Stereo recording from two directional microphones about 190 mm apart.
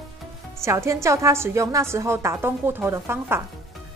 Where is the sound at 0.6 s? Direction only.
15° right (ahead or behind).